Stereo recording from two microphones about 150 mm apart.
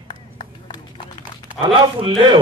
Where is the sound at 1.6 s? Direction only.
35° right (ahead or behind).